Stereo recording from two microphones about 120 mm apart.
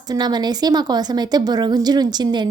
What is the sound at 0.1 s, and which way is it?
A woman's voice, 35° right (ahead or behind).